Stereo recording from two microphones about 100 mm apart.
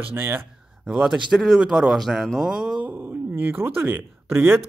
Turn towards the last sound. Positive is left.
turn(degrees=-25)  # may be behind; listen again after turning